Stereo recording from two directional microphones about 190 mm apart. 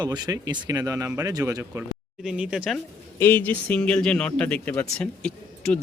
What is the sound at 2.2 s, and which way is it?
Speech, 5° right (ahead or behind).